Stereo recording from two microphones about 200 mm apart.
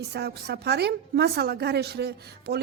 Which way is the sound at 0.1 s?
55° right (ahead or behind).